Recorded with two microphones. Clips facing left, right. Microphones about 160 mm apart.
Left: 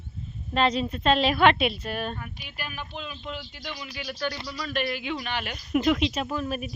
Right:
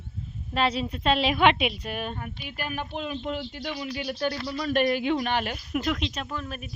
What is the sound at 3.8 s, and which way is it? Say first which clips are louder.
Speech: right 3 dB; 40° right (ahead or behind).